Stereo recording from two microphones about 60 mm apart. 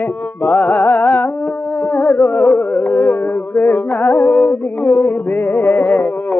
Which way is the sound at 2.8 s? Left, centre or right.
Left.